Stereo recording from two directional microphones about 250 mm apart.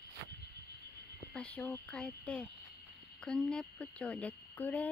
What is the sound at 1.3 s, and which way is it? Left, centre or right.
Speech, centre.